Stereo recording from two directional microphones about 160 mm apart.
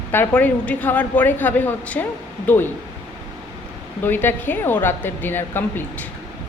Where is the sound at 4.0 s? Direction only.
10° left (ahead or behind).